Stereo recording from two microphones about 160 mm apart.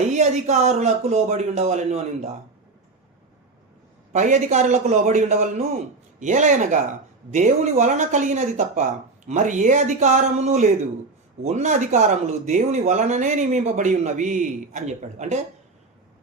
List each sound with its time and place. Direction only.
0.1 s speech: 45° right (ahead or behind)
4.1 s speech: 50° right (ahead or behind)